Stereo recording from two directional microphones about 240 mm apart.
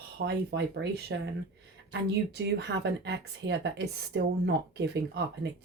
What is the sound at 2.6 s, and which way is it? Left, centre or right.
Speech, right.